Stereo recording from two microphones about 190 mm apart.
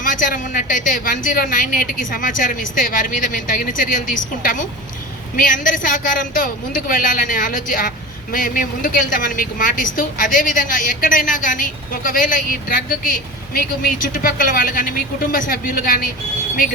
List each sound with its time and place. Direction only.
0.0 s a woman's voice: 45° left (ahead or behind)